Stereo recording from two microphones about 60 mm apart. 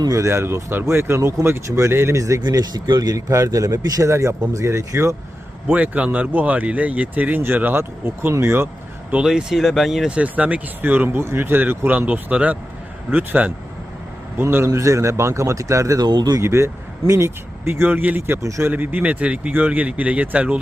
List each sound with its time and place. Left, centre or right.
0.1 s speech: right
4.1 s speech: right
5.6 s speech: right
9.2 s speech: centre
10.1 s speech: right
11.9 s speech: right
14.7 s speech: right
16.4 s speech: right